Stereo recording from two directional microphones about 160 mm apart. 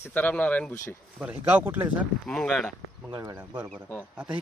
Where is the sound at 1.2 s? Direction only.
10° right (ahead or behind).